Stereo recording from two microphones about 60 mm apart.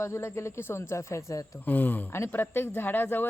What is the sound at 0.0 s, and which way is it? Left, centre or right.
Speech, left.